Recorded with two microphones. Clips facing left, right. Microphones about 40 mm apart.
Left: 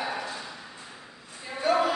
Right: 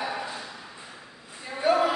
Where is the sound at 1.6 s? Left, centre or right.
Centre.